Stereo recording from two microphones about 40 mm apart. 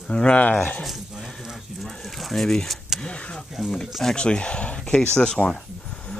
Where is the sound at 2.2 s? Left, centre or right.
Centre.